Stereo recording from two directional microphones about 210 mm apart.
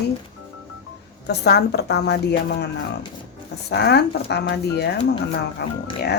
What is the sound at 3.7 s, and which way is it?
Speech, 50° left (ahead or behind).